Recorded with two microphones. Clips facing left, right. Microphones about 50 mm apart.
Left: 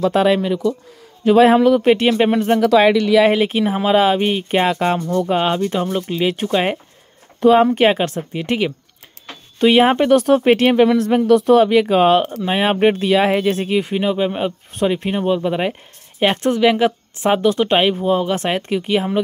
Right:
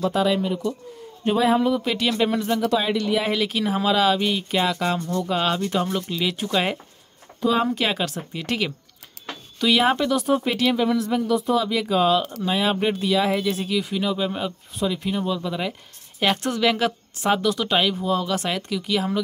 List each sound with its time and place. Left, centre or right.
0.0 s a man's voice: left
1.9 s speech: left
2.6 s speech: left
3.3 s speech: left
5.3 s speech: left
8.3 s speech: left
10.1 s speech: left
14.8 s speech: left
16.2 s speech: left